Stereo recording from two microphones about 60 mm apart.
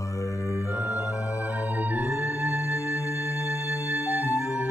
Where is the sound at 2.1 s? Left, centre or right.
Left.